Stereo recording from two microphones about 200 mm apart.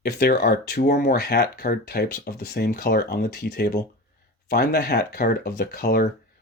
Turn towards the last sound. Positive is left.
turn(degrees=50)  # may be behind; listen again after turning